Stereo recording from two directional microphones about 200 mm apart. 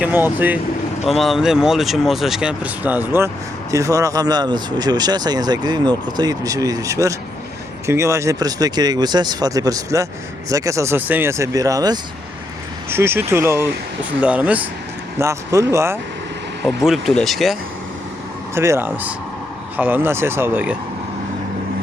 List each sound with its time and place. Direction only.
0.0 s speech: 10° right (ahead or behind)
16.6 s speech: centre (ahead or behind)
18.5 s speech: 15° right (ahead or behind)